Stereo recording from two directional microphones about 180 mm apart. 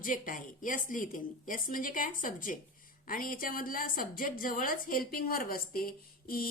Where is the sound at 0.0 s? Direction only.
50° left (ahead or behind).